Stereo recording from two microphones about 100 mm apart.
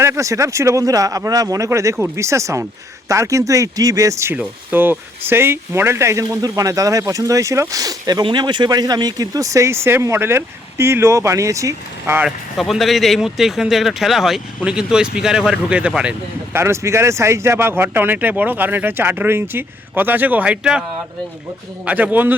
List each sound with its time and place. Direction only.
0.0 s speech: 30° right (ahead or behind)
4.4 s speech: 20° right (ahead or behind); by 8.2 s 40° right (ahead or behind)
8.2 s speech: 50° right (ahead or behind); by 12.1 s 30° right (ahead or behind)
12.2 s speech: centre (ahead or behind)
16.5 s speech: 25° right (ahead or behind); by 20.8 s 10° right (ahead or behind)
21.8 s speech: 15° right (ahead or behind)